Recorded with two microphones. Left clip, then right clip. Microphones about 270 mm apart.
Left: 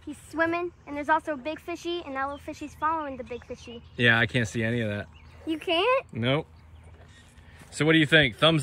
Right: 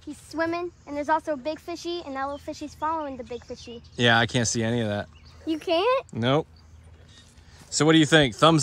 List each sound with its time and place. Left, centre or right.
0.5 s speech: right
3.5 s speech: centre
5.5 s speech: right
6.1 s speech: centre
7.7 s speech: centre